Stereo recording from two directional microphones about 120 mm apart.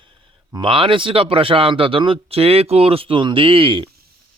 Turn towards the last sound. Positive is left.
turn(degrees=-45)  # may be behind; listen again after turning